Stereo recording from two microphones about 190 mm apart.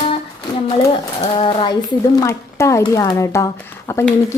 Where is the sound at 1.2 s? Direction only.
30° left (ahead or behind).